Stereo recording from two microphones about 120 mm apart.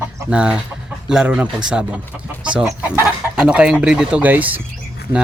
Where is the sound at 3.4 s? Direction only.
10° right (ahead or behind).